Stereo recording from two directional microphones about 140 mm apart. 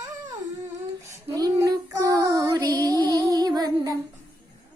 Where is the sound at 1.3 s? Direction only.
25° right (ahead or behind).